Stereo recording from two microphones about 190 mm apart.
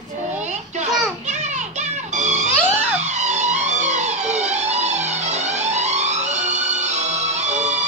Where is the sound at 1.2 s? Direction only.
35° right (ahead or behind).